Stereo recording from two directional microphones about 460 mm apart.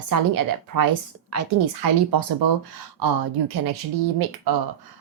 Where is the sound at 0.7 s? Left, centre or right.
Right.